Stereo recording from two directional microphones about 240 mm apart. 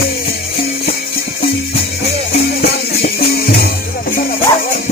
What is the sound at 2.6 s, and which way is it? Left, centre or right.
Music, left.